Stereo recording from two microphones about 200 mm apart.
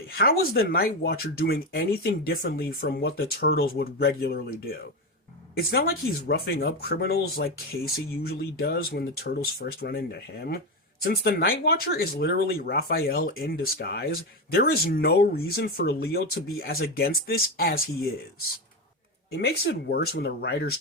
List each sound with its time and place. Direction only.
0.1 s speech: 50° left (ahead or behind)
5.5 s speech: 50° left (ahead or behind)
19.3 s speech: 55° left (ahead or behind)